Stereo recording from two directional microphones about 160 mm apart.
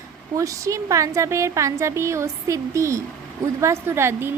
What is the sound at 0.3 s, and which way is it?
A woman's voice, 20° right (ahead or behind).